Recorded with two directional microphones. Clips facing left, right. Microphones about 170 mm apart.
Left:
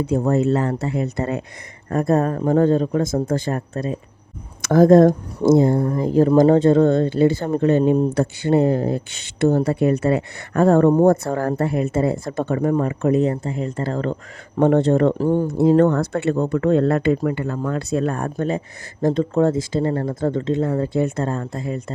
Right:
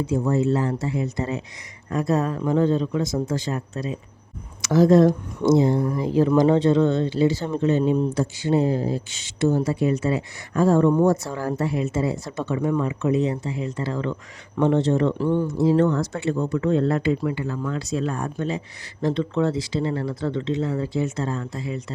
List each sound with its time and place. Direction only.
0.0 s speech: 60° left (ahead or behind); by 15.4 s 45° left (ahead or behind)
15.4 s speech: 55° left (ahead or behind)